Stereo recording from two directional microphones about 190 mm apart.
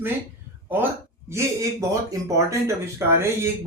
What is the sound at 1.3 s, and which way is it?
Speech, 15° right (ahead or behind).